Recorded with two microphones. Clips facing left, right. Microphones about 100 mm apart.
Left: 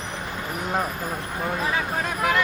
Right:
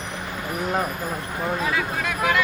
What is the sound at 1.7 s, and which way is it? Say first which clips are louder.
Speech: even; 35° left (ahead or behind).